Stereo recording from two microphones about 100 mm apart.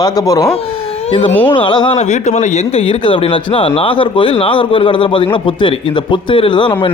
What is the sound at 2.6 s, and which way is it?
Speech, 85° left.